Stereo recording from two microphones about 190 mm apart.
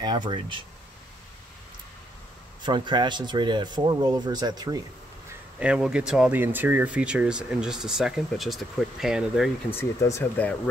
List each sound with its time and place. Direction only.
0.0 s speech: 25° right (ahead or behind)
2.6 s speech: 25° right (ahead or behind)
5.6 s speech: 5° right (ahead or behind)
9.8 s speech: 15° left (ahead or behind)